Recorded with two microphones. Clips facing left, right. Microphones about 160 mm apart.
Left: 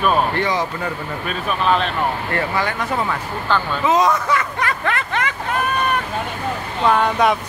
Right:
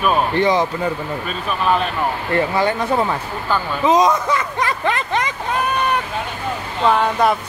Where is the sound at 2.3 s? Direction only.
25° right (ahead or behind).